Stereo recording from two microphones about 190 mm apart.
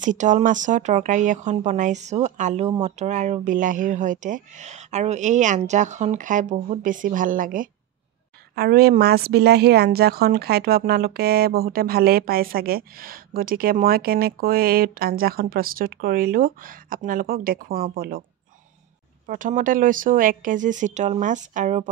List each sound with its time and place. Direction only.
0.0 s a woman's voice: 40° right (ahead or behind)
19.2 s a woman's voice: 45° right (ahead or behind)